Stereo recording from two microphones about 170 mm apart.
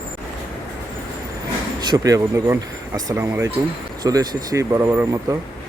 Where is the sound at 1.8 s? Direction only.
25° right (ahead or behind).